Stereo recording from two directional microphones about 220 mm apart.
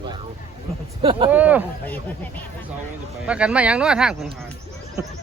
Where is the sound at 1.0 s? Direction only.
25° right (ahead or behind).